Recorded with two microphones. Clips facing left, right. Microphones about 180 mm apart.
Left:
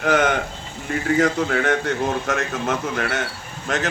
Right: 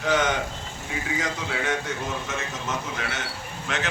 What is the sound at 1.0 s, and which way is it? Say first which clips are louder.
Speech: left 12 dB; 55° left (ahead or behind).